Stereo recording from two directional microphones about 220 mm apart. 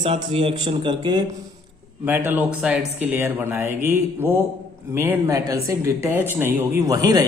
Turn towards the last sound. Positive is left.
turn(degrees=-15)  # may be behind; listen again after turning